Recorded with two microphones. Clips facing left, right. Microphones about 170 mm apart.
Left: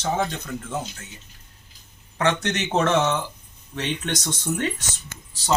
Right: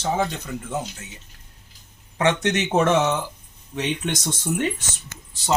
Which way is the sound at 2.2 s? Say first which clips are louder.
Right 2 dB; 20° right (ahead or behind).